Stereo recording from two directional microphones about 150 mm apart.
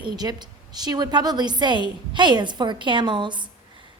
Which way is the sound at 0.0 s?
30° right (ahead or behind).